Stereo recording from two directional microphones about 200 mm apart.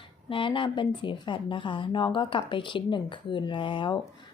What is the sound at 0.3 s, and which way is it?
Speech, 25° left (ahead or behind).